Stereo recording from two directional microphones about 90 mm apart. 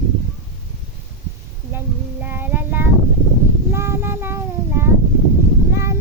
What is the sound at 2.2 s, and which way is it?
Child singing, 20° right (ahead or behind).